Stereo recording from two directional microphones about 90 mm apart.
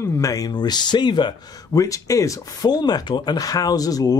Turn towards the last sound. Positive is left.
turn(degrees=45)  # may be behind; listen again after turning